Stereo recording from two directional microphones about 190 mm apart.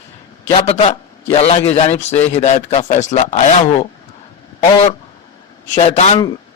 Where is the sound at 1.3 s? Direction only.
30° left (ahead or behind).